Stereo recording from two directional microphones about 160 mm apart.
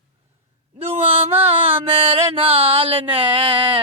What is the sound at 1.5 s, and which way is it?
Speech, 40° right (ahead or behind).